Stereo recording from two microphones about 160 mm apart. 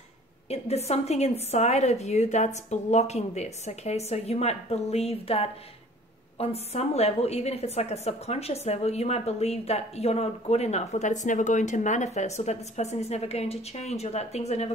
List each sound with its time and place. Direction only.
0.5 s a woman's voice: 40° left (ahead or behind)